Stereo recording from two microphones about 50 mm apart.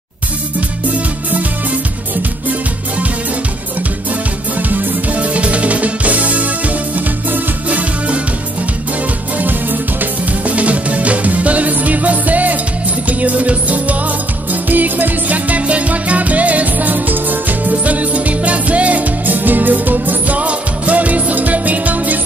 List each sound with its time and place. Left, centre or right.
4.6 s music: right
9.4 s music: right